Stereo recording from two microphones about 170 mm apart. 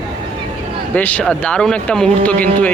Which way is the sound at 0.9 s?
10° left (ahead or behind).